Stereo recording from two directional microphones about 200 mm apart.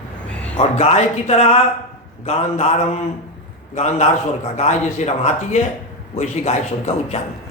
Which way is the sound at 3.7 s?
35° left (ahead or behind).